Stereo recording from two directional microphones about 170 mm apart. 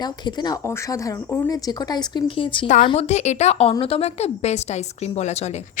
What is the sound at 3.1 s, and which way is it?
Speech, 40° left (ahead or behind).